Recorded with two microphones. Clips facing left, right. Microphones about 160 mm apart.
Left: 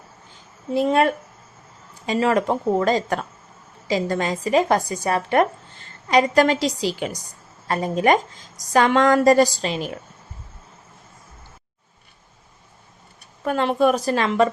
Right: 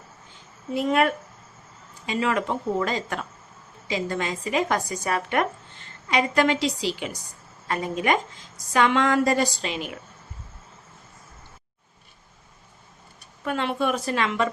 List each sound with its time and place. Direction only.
0.7 s a woman's voice: 30° left (ahead or behind)
13.4 s a woman's voice: 40° left (ahead or behind)